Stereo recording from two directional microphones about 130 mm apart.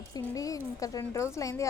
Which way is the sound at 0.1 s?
25° left (ahead or behind).